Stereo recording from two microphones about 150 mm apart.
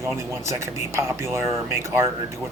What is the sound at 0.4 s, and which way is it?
A man's voice, 20° right (ahead or behind).